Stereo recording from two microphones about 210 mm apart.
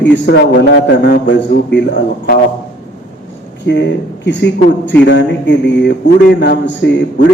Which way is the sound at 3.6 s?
55° left (ahead or behind).